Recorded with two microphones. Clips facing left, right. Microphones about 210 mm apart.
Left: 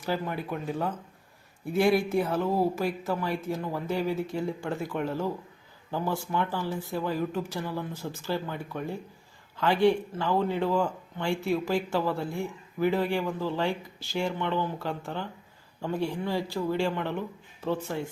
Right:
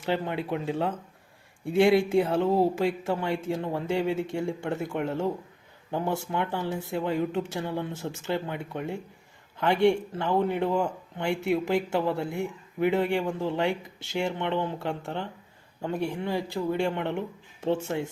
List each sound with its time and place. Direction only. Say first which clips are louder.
0.0 s speech: right 2 dB; 25° right (ahead or behind)